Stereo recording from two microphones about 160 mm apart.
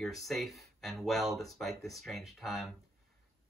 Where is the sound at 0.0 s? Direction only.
Centre (ahead or behind).